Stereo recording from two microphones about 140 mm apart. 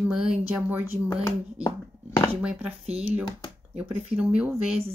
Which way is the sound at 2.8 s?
45° right (ahead or behind).